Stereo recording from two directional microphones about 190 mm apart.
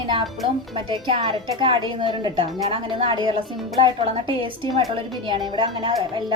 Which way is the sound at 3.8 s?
25° right (ahead or behind).